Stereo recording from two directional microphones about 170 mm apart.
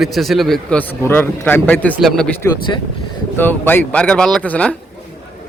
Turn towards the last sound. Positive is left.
turn(degrees=10)  # may be behind; listen again after turning